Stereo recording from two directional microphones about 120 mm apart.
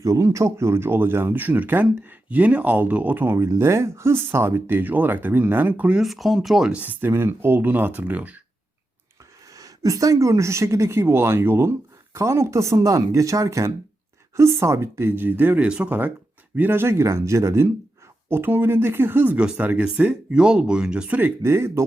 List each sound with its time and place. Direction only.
0.0 s speech: 25° right (ahead or behind)
3.3 s speech: 25° right (ahead or behind)
9.6 s a woman's voice: 30° right (ahead or behind)